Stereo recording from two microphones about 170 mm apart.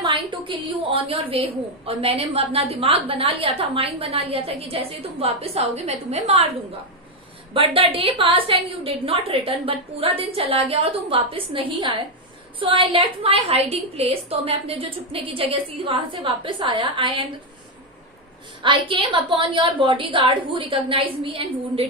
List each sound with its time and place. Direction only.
0.0 s a woman's voice: 30° right (ahead or behind)
7.5 s a woman's voice: 30° right (ahead or behind)
18.6 s a woman's voice: 30° right (ahead or behind)